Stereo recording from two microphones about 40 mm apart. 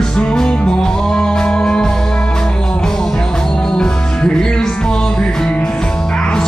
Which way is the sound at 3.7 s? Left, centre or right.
Centre.